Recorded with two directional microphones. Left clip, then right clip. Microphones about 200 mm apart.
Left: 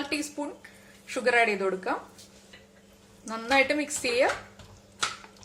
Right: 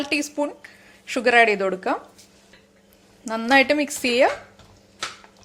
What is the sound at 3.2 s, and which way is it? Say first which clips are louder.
A woman's voice: right 7 dB; 40° right (ahead or behind).